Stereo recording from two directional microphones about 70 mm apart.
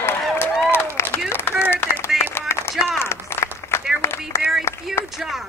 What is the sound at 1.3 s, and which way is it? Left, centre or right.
Clapping, left.